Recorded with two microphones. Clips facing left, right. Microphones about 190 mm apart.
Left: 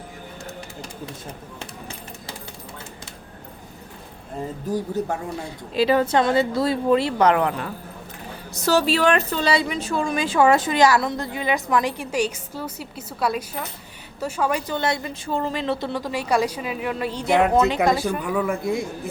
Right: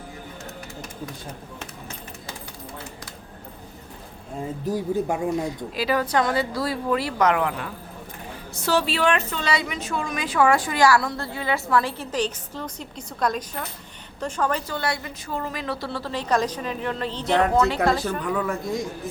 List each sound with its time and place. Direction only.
5.3 s a woman's voice: 30° left (ahead or behind); by 14.6 s 10° left (ahead or behind)
14.7 s a woman's voice: 20° left (ahead or behind)